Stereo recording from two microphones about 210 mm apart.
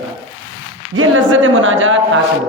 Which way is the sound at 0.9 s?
80° right.